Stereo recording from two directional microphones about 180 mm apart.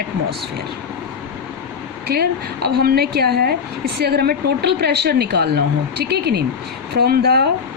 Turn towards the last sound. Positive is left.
turn(degrees=-60)  # may be behind; listen again after turning